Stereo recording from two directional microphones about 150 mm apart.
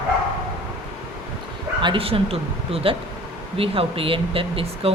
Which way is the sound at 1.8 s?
35° right (ahead or behind).